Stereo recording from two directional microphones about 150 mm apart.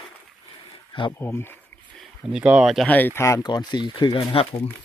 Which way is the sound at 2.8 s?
10° left (ahead or behind).